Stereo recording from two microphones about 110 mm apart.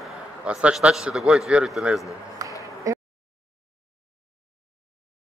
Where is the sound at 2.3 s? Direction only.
30° right (ahead or behind).